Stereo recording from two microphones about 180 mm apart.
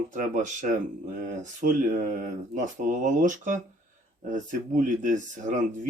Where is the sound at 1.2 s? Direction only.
45° right (ahead or behind).